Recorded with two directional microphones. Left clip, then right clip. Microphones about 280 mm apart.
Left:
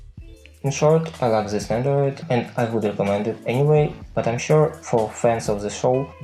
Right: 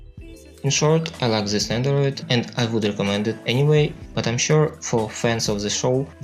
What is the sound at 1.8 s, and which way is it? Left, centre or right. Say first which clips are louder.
Speech: left 1 dB; right.